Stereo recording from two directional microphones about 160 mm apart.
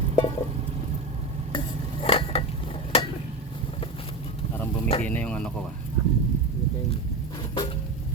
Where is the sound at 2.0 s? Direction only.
35° left (ahead or behind).